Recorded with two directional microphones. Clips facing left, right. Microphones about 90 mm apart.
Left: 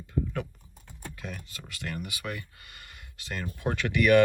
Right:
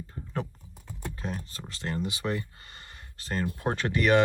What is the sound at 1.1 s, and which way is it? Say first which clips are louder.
Speech: right 4 dB; 35° right (ahead or behind).